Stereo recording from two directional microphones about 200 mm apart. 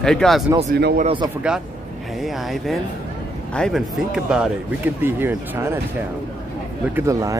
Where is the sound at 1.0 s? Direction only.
25° right (ahead or behind).